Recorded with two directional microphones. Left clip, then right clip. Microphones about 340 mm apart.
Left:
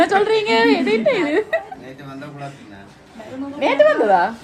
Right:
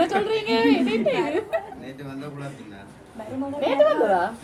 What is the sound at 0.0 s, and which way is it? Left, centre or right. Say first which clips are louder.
A woman's voice: left 7 dB; left.